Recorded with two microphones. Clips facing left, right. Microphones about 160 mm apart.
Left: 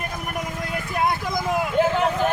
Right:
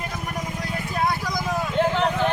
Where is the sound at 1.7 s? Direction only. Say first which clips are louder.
Left 1 dB; 5° left (ahead or behind).